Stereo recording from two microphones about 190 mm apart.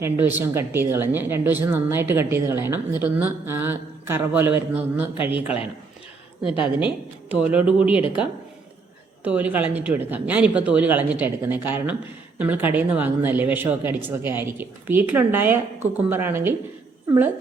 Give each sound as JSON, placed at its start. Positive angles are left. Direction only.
{"t": 0.0, "sound": "a woman's voice", "side_deg": -10}
{"t": 6.4, "sound": "a woman's voice", "side_deg": 30}
{"t": 7.3, "sound": "a woman's voice", "side_deg": -5}